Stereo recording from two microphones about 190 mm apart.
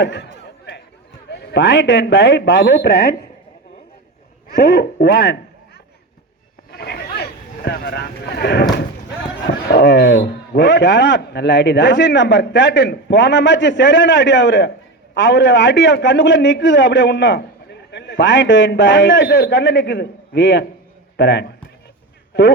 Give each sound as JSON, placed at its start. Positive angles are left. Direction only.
{"t": 0.0, "sound": "a man's voice", "side_deg": 65}
{"t": 1.3, "sound": "a man's voice", "side_deg": 65}
{"t": 4.4, "sound": "a sound", "side_deg": 60}
{"t": 9.6, "sound": "a man's voice", "side_deg": 65}
{"t": 19.3, "sound": "a man's voice", "side_deg": 60}